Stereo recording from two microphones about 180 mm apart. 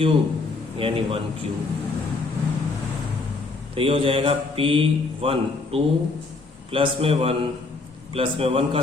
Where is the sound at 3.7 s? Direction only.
30° right (ahead or behind).